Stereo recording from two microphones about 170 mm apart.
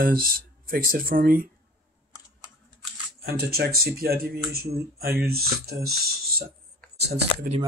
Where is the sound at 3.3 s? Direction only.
65° right (ahead or behind).